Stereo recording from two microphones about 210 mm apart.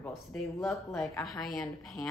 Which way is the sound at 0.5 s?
15° left (ahead or behind).